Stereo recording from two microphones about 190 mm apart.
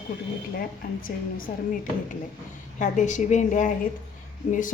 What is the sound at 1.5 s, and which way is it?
Speech, 50° left (ahead or behind).